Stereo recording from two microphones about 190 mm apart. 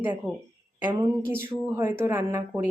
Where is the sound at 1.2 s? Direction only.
10° right (ahead or behind).